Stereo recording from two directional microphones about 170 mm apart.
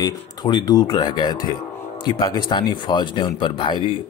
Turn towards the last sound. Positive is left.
turn(degrees=30)  # may be behind; listen again after turning